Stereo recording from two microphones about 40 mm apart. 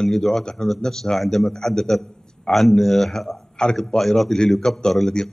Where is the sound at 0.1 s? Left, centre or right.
Centre.